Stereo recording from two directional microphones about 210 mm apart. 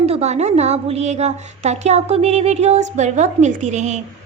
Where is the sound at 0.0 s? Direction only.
30° right (ahead or behind).